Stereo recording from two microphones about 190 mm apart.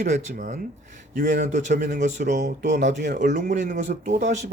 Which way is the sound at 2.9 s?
65° right (ahead or behind).